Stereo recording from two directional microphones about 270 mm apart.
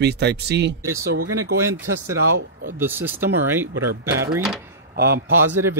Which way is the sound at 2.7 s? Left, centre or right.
Centre.